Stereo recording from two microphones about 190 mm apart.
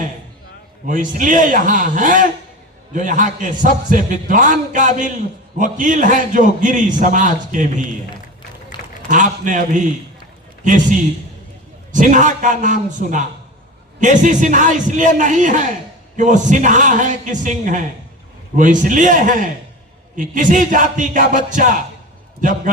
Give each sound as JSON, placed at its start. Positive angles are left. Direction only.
{"t": 0.9, "sound": "a man's voice", "side_deg": -45}
{"t": 8.7, "sound": "a sound", "side_deg": 25}
{"t": 9.0, "sound": "a man's voice", "side_deg": -40}